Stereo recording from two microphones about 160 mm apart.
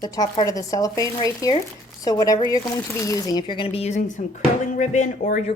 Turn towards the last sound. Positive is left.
turn(degrees=55)  # may be behind; listen again after turning